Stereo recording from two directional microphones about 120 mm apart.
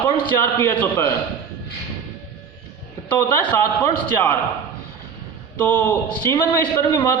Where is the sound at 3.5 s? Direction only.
25° left (ahead or behind).